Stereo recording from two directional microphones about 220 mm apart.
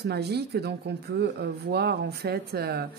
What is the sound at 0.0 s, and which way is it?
Speech, 50° right (ahead or behind).